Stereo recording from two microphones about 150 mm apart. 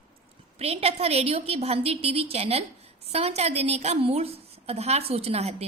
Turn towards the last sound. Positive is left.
turn(degrees=-45)  # may be behind; listen again after turning